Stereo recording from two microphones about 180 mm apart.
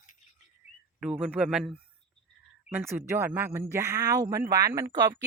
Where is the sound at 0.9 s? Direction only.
5° right (ahead or behind).